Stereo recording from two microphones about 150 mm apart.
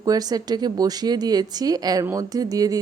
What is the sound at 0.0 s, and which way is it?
Speech, 25° right (ahead or behind).